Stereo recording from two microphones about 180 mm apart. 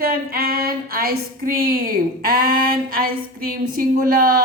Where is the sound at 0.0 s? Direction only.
55° right (ahead or behind).